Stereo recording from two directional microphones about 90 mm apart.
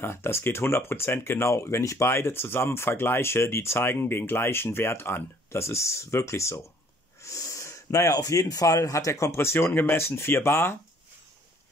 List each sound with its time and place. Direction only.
0.0 s speech: 25° left (ahead or behind)